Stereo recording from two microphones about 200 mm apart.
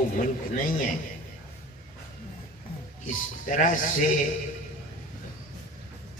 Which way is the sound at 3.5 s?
40° left (ahead or behind).